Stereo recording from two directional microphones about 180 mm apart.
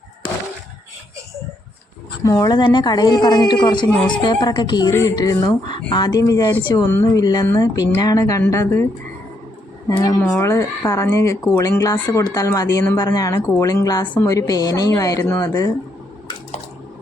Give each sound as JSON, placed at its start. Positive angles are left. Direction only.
{"t": 2.2, "sound": "a woman's voice", "side_deg": 20}
{"t": 10.0, "sound": "a woman's voice", "side_deg": 15}